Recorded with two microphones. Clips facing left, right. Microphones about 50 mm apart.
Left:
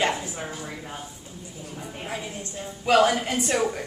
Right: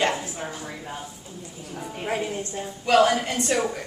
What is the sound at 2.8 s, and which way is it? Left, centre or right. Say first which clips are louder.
A woman's voice: right 1 dB; centre.